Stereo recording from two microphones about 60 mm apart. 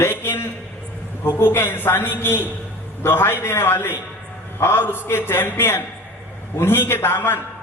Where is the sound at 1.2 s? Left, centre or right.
Left.